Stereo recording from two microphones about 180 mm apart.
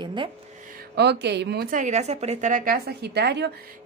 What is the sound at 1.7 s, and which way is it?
A woman's voice, 45° right (ahead or behind).